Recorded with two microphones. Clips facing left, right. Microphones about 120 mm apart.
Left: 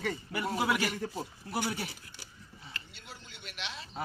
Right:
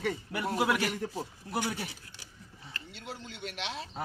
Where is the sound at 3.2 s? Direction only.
90° right.